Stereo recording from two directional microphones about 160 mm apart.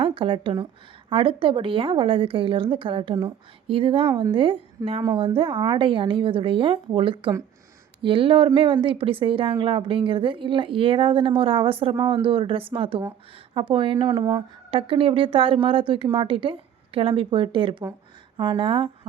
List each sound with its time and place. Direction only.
0.0 s a woman's voice: 35° right (ahead or behind)